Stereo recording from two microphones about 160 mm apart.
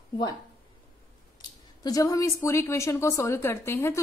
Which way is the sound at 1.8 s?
25° left (ahead or behind).